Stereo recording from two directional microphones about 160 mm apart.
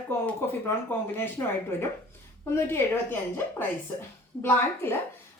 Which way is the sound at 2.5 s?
15° left (ahead or behind).